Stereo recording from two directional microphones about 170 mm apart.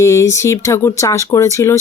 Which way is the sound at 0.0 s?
15° left (ahead or behind).